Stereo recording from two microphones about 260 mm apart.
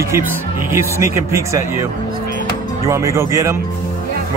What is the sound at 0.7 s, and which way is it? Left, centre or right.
Speech, centre.